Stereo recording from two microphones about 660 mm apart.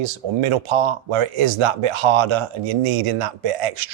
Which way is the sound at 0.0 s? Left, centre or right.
Right.